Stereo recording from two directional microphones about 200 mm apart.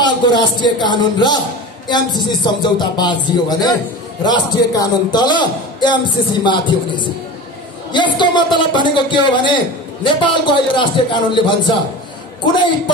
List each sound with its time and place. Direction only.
0.0 s a man's voice: 20° left (ahead or behind)